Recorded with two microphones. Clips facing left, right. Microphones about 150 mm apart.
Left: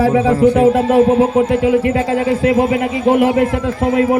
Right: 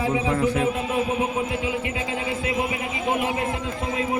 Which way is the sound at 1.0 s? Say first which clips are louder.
Left 12 dB; 40° left (ahead or behind).